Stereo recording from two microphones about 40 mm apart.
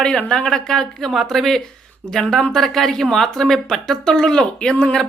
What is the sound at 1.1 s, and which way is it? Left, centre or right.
Speech, centre.